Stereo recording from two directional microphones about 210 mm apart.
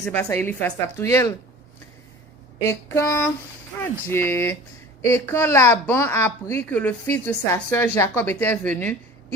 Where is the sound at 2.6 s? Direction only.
10° left (ahead or behind).